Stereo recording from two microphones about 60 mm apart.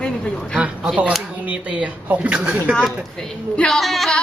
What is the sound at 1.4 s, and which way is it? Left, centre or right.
Speech, right.